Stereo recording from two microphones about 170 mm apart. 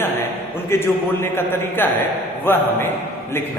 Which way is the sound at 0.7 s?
15° left (ahead or behind).